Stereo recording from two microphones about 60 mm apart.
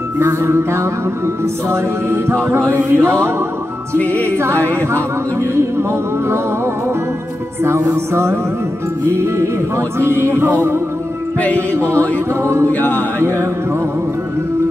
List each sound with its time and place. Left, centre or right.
0.2 s music: right
4.0 s music: left
4.4 s music: right
4.6 s music: left
5.5 s music: right
8.1 s music: right
11.3 s music: left
13.2 s music: right